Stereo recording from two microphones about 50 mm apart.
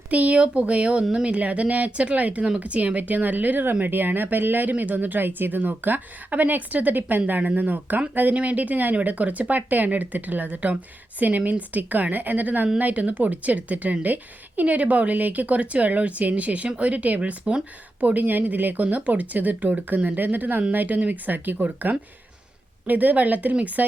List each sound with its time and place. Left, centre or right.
0.1 s a woman's voice: right